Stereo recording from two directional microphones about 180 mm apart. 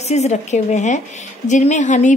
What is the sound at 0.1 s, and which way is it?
Speech, 40° left (ahead or behind).